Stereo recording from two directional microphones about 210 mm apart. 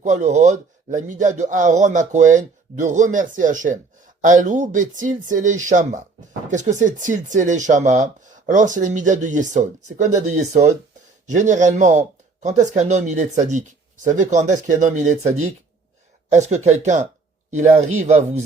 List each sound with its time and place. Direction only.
0.0 s speech: 35° right (ahead or behind)